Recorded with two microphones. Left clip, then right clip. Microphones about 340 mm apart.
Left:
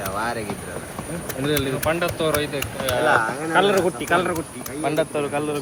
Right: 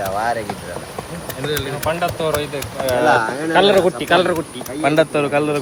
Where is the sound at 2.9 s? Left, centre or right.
Right.